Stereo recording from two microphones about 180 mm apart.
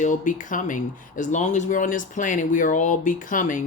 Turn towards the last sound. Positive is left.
turn(degrees=45)  # may be behind; listen again after turning